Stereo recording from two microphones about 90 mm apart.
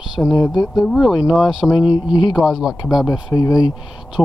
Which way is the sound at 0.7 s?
Centre (ahead or behind).